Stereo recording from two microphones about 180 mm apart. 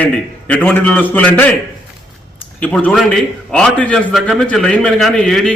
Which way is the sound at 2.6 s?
10° left (ahead or behind).